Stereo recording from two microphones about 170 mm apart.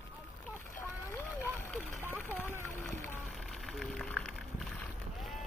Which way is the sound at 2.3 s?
10° left (ahead or behind).